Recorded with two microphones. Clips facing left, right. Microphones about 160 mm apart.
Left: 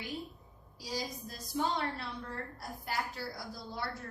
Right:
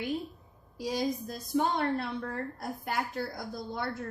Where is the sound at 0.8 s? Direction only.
55° right (ahead or behind).